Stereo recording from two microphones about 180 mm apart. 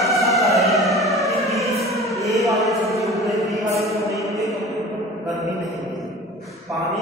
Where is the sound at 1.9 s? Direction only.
Centre (ahead or behind).